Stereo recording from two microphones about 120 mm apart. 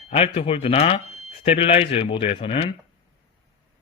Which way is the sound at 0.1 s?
55° left (ahead or behind).